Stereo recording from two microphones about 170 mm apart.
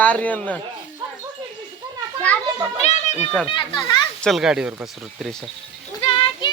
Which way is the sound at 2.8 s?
40° left (ahead or behind).